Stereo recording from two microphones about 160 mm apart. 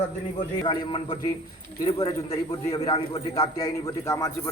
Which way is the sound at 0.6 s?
30° left (ahead or behind).